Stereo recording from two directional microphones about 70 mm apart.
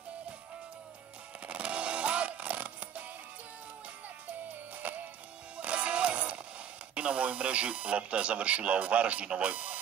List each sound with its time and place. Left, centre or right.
1.4 s music: centre
4.8 s music: right
7.0 s speech: centre